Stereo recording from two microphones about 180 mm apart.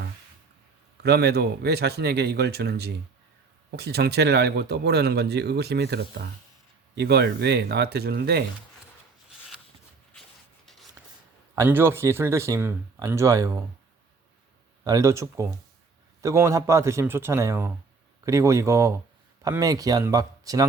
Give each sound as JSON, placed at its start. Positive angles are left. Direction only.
{"t": 1.0, "sound": "speech", "side_deg": -65}
{"t": 11.5, "sound": "speech", "side_deg": -15}
{"t": 14.8, "sound": "speech", "side_deg": -20}